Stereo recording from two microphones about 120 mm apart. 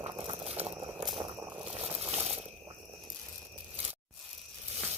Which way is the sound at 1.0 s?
Centre (ahead or behind).